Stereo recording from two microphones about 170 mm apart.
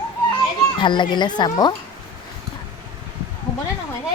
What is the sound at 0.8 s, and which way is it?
Speech, 25° left (ahead or behind).